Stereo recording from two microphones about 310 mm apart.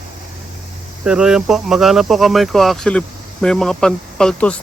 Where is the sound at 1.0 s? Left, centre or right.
Centre.